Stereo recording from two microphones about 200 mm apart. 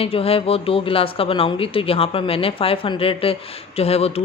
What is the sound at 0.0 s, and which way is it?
Speech, 30° left (ahead or behind).